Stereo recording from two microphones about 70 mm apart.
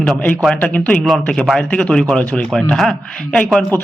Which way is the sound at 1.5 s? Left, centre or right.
Centre.